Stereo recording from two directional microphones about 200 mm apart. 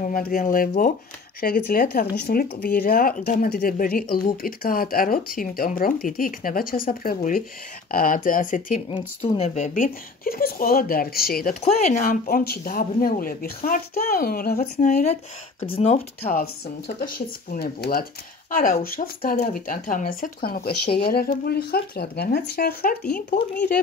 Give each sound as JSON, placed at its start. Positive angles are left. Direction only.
{"t": 0.1, "sound": "speech", "side_deg": 45}
{"t": 11.6, "sound": "speech", "side_deg": 35}